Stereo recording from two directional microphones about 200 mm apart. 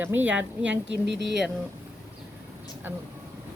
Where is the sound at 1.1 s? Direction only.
60° right (ahead or behind).